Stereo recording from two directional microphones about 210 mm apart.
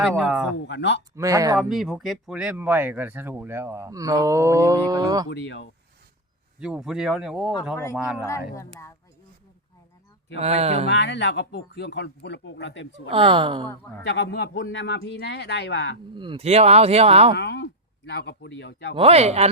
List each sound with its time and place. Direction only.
0.0 s speech: 5° right (ahead or behind)
0.7 s speech: 55° left (ahead or behind)
1.1 s speech: 15° right (ahead or behind)
1.5 s speech: centre (ahead or behind); by 5.3 s 20° right (ahead or behind)
5.3 s speech: 55° left (ahead or behind)
6.6 s speech: 5° right (ahead or behind)
10.3 s speech: 30° right (ahead or behind)
10.8 s speech: 55° left (ahead or behind)
13.1 s speech: 25° right (ahead or behind)
14.1 s speech: 55° left (ahead or behind)
16.1 s speech: 25° right (ahead or behind)
17.3 s speech: 55° left (ahead or behind)
18.9 s speech: 30° right (ahead or behind)